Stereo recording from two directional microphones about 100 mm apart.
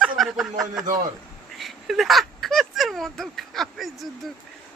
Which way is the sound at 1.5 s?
Centre (ahead or behind).